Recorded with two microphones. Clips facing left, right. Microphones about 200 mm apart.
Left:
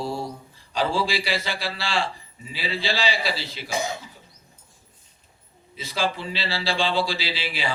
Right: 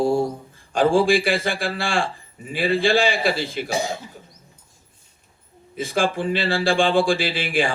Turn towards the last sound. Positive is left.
turn(degrees=-50)  # may be behind; listen again after turning